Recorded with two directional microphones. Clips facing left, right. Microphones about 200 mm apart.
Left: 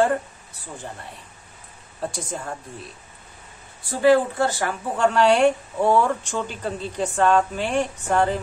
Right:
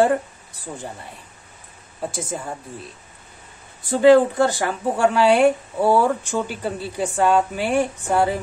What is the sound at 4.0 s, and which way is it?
A woman's voice, 20° right (ahead or behind).